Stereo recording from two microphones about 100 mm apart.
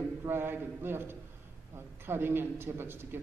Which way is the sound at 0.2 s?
25° right (ahead or behind).